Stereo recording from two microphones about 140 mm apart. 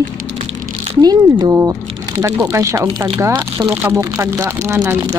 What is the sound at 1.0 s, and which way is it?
Speech, 30° right (ahead or behind).